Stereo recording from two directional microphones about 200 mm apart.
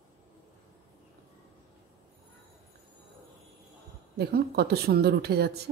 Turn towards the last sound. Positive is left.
turn(degrees=-55)  # may be behind; listen again after turning